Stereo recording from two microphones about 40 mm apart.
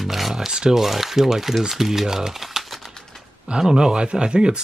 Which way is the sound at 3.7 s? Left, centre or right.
Centre.